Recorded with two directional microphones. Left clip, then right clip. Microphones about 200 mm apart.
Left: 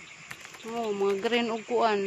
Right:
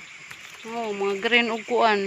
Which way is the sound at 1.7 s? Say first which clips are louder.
Right 3 dB; 20° right (ahead or behind).